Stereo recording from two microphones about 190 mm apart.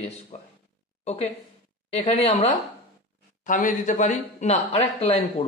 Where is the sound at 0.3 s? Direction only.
35° left (ahead or behind).